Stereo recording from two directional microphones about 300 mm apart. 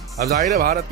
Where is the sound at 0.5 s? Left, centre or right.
Right.